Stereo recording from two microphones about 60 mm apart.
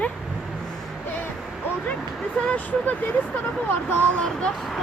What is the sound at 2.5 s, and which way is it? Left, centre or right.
Speech, left.